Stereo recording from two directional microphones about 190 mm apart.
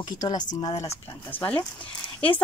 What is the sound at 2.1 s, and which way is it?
Speech, 10° left (ahead or behind).